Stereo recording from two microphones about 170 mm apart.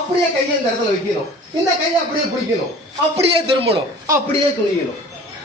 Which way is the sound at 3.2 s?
35° right (ahead or behind).